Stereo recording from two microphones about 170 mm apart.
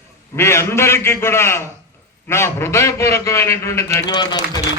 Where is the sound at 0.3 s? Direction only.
15° left (ahead or behind).